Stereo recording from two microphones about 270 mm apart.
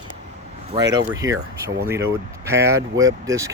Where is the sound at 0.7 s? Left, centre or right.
Centre.